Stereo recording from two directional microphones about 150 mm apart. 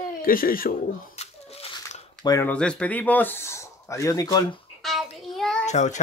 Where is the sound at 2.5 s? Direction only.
5° left (ahead or behind); by 4.4 s 25° left (ahead or behind).